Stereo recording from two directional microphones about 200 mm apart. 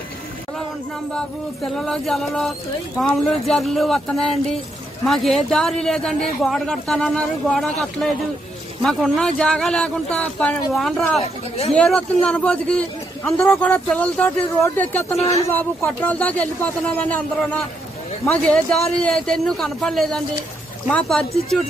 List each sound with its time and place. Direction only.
1.8 s a man's voice: centre (ahead or behind)
15.1 s speech: 30° left (ahead or behind)
15.5 s a man's voice: 10° left (ahead or behind)
18.2 s a man's voice: 5° left (ahead or behind)